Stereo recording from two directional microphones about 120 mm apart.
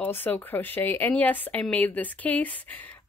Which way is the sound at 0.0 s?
15° left (ahead or behind).